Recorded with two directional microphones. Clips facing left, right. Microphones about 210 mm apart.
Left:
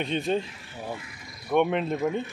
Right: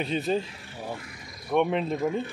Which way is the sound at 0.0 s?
5° right (ahead or behind).